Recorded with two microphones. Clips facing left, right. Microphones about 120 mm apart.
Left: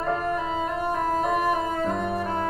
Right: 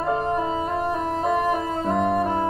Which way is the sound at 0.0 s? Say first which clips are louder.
Right 3 dB; 25° right (ahead or behind).